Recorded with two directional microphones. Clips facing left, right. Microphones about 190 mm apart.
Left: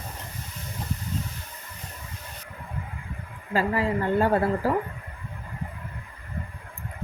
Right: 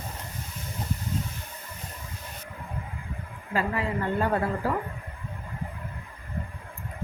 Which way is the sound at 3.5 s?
35° left (ahead or behind).